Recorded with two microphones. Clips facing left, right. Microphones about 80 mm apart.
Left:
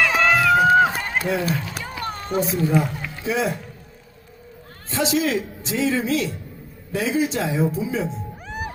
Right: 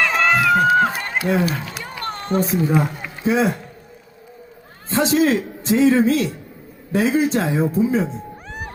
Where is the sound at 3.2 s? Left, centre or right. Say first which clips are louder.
Right 5 dB; right.